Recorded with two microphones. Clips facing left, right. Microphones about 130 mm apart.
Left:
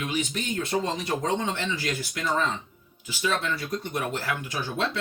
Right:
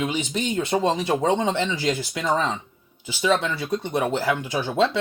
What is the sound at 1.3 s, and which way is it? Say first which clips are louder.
Speech: right 6 dB; 25° right (ahead or behind).